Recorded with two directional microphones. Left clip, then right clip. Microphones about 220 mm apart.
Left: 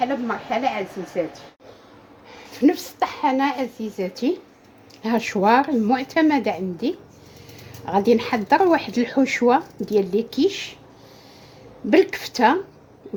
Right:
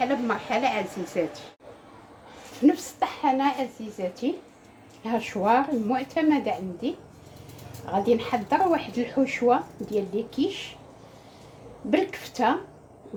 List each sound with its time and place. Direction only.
0.0 s a woman's voice: centre (ahead or behind)
2.6 s speech: 45° left (ahead or behind)
7.9 s speech: 45° left (ahead or behind)
11.9 s speech: 45° left (ahead or behind)